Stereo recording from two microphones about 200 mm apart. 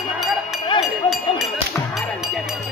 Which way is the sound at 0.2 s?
Centre (ahead or behind).